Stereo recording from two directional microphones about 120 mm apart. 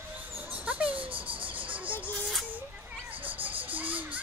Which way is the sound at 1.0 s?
45° right (ahead or behind).